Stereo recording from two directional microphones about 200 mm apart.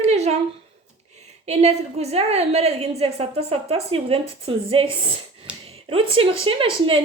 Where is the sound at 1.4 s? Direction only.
30° right (ahead or behind).